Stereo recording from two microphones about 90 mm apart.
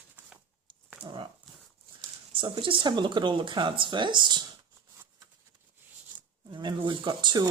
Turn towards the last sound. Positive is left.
turn(degrees=-55)  # may be behind; listen again after turning